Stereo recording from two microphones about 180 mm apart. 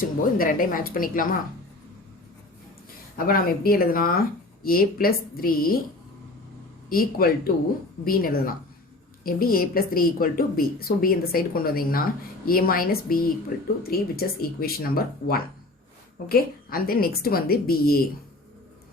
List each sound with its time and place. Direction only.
0.0 s speech: 50° left (ahead or behind)
3.2 s a woman's voice: 55° left (ahead or behind)
6.9 s a woman's voice: 55° left (ahead or behind)